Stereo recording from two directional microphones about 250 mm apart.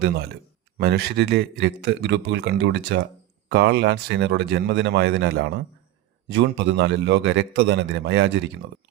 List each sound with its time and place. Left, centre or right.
0.8 s a man's voice: right